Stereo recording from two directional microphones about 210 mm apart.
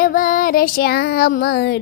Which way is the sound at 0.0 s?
40° left (ahead or behind).